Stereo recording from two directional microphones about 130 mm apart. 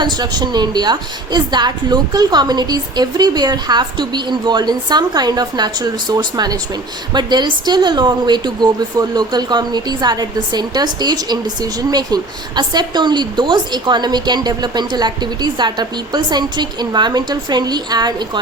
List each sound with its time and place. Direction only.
0.0 s a woman's voice: 35° right (ahead or behind)